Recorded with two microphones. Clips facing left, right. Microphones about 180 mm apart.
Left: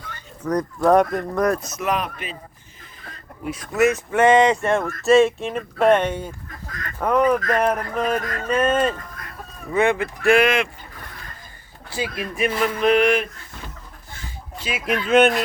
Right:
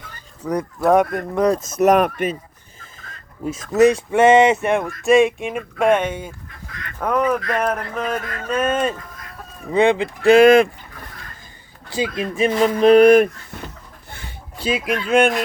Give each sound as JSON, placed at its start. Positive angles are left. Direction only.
{"t": 0.4, "sound": "speech", "side_deg": -5}
{"t": 1.5, "sound": "speech", "side_deg": -45}
{"t": 3.6, "sound": "speech", "side_deg": -40}
{"t": 4.1, "sound": "speech", "side_deg": -25}
{"t": 6.7, "sound": "goose", "side_deg": 45}
{"t": 7.0, "sound": "a sound", "side_deg": 0}
{"t": 9.7, "sound": "speech", "side_deg": -20}
{"t": 10.4, "sound": "speech", "side_deg": -35}
{"t": 11.9, "sound": "speech", "side_deg": -20}
{"t": 14.6, "sound": "speech", "side_deg": -25}
{"t": 14.9, "sound": "a sound", "side_deg": 0}